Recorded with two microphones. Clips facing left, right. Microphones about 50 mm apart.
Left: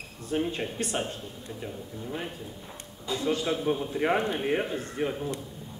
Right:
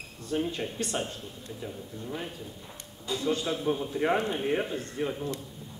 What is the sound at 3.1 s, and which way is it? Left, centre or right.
A man's voice, centre.